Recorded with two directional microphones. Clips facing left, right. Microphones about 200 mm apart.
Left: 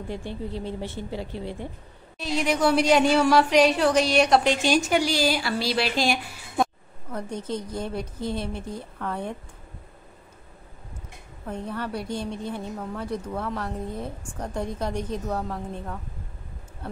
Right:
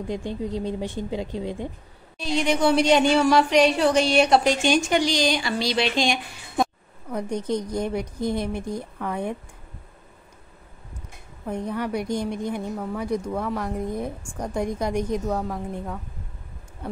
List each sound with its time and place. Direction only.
0.1 s a woman's voice: 15° right (ahead or behind)
2.1 s a woman's voice: centre (ahead or behind)
7.1 s a woman's voice: 15° right (ahead or behind)
11.4 s a woman's voice: 15° right (ahead or behind)